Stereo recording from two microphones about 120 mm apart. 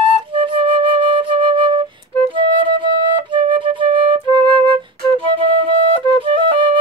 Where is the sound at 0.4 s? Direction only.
50° right (ahead or behind).